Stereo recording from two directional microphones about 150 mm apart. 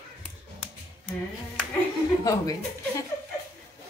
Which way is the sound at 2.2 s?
25° left (ahead or behind).